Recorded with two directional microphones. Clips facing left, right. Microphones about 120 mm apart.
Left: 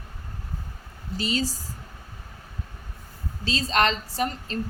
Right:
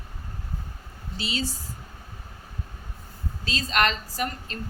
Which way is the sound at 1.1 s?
40° left (ahead or behind).